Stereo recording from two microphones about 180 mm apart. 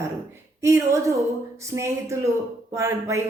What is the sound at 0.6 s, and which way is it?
Speech, 15° right (ahead or behind).